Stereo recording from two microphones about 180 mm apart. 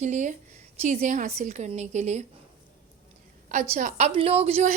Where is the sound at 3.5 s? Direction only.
40° right (ahead or behind).